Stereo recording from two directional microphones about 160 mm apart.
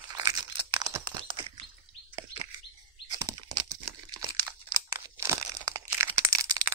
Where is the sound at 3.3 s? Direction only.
25° right (ahead or behind).